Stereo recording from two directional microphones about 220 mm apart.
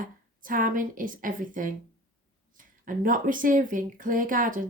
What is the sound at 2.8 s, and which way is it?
Speech, 40° right (ahead or behind).